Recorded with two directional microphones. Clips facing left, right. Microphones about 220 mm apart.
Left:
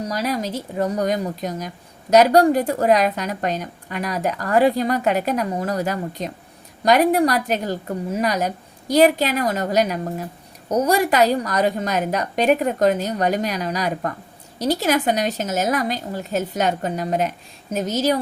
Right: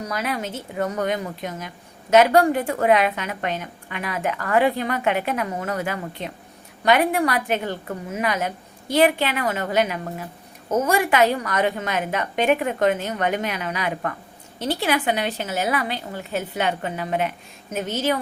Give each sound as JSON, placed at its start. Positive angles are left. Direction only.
{"t": 0.1, "sound": "speech", "side_deg": 35}